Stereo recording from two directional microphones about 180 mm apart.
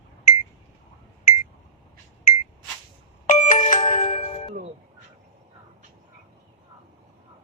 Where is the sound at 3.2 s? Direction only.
45° left (ahead or behind).